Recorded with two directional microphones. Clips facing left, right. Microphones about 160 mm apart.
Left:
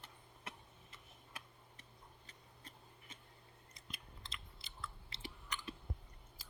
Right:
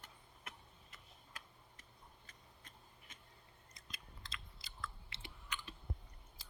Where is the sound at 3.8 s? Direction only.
30° left (ahead or behind).